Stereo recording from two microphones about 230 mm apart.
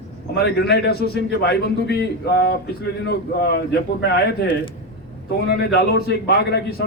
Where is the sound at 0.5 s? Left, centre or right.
Left.